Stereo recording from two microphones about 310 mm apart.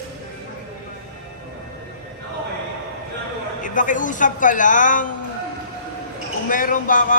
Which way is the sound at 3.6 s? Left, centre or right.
Left.